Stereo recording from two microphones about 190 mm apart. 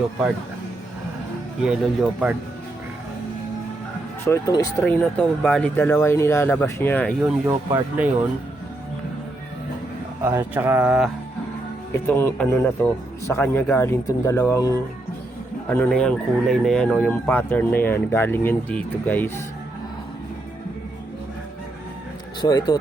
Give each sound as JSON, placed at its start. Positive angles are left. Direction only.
{"t": 1.6, "sound": "speech", "side_deg": -5}
{"t": 4.3, "sound": "speech", "side_deg": 20}
{"t": 7.4, "sound": "speech", "side_deg": -10}
{"t": 10.2, "sound": "speech", "side_deg": -10}
{"t": 12.0, "sound": "speech", "side_deg": 10}
{"t": 15.7, "sound": "speech", "side_deg": 5}
{"t": 22.4, "sound": "speech", "side_deg": 20}